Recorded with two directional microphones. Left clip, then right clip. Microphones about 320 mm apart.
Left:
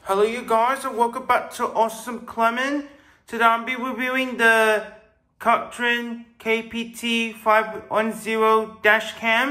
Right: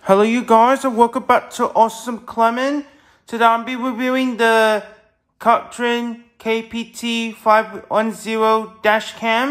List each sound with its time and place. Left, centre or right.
0.0 s speech: right